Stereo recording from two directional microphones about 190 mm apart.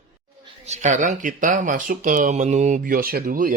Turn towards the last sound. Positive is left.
turn(degrees=-45)  # may be behind; listen again after turning